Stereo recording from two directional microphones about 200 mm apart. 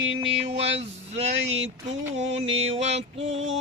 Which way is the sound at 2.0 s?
70° right (ahead or behind).